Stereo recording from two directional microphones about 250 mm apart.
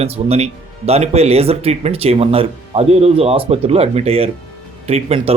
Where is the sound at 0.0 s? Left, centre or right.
Right.